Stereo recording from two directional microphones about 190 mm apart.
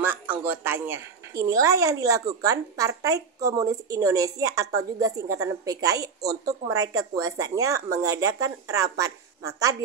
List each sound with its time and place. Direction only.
0.0 s a woman's voice: 10° right (ahead or behind)